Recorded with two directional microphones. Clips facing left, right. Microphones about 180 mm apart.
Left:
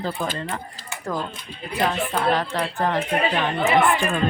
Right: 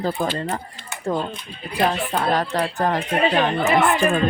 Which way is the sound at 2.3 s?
40° right (ahead or behind).